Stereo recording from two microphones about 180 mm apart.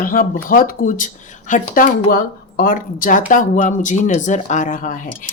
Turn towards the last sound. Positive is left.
turn(degrees=45)  # may be behind; listen again after turning